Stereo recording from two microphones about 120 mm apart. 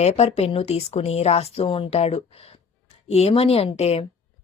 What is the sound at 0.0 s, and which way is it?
Speech, 60° left (ahead or behind).